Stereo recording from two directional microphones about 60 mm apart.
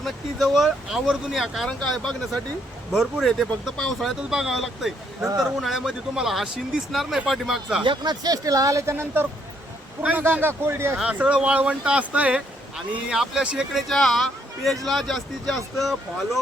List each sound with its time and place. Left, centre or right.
0.0 s speech: centre
4.3 s speech: centre
8.1 s speech: right
8.9 s speech: right
10.1 s speech: right
10.7 s speech: right
10.9 s speech: centre
12.7 s speech: centre
13.7 s speech: centre